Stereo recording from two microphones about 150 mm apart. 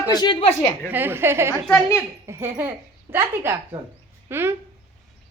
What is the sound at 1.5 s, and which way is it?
Speech, 5° left (ahead or behind).